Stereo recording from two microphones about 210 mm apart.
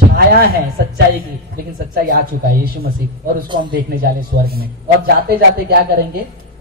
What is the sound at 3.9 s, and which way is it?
A man's voice, 45° right (ahead or behind).